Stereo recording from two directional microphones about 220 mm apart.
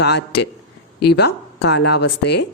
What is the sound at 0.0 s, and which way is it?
A woman's voice, 50° left (ahead or behind).